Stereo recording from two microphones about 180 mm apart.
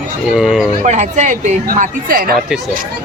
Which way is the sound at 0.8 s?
40° right (ahead or behind).